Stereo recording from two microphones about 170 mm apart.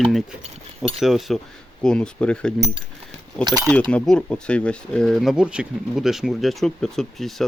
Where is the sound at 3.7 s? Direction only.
10° left (ahead or behind).